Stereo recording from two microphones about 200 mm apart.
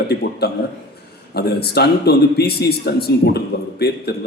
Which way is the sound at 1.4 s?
55° left (ahead or behind).